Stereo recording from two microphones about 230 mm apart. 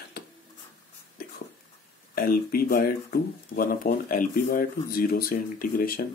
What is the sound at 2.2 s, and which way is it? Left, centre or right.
Speech, left.